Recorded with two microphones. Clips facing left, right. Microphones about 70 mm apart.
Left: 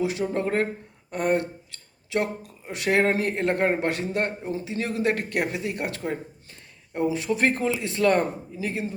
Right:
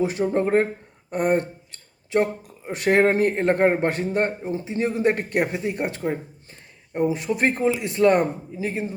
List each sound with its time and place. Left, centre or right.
0.0 s speech: right
7.1 s speech: right